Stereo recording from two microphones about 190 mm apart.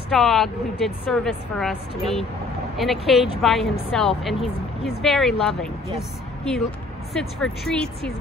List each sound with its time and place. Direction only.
0.1 s a woman's voice: centre (ahead or behind)